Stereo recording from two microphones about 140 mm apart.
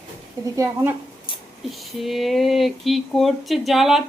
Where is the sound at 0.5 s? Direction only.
20° right (ahead or behind).